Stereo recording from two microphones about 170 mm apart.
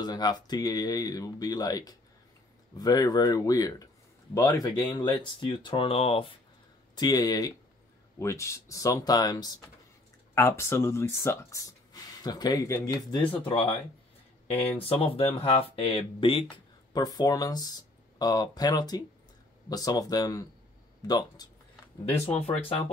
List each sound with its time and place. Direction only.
0.0 s speech: 25° left (ahead or behind)
7.0 s speech: 25° left (ahead or behind)
13.5 s speech: 35° left (ahead or behind)